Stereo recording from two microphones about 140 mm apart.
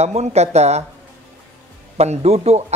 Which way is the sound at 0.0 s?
50° right (ahead or behind).